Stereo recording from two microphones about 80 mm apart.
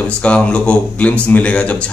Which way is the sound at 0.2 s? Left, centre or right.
Centre.